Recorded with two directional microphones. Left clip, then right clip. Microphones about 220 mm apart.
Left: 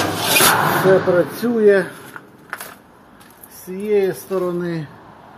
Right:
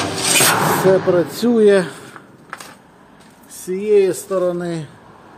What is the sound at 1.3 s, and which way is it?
Speech, 20° right (ahead or behind).